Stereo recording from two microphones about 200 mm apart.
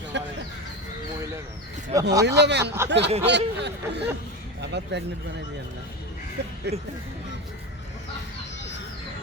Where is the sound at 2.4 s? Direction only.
55° right (ahead or behind).